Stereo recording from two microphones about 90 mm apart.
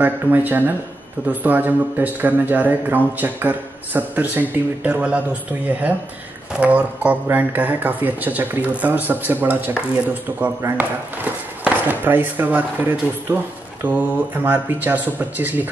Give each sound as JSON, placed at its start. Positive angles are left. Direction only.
{"t": 0.0, "sound": "speech", "side_deg": -20}
{"t": 11.6, "sound": "speech", "side_deg": -20}